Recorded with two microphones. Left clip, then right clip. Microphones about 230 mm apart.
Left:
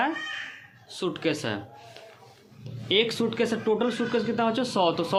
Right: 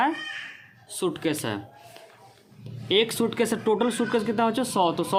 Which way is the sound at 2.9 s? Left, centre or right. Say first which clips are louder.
Right 1 dB; right.